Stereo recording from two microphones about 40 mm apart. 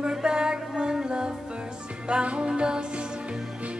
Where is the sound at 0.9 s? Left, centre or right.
Right.